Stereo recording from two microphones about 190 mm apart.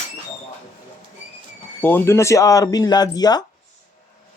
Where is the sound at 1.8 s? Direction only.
10° left (ahead or behind).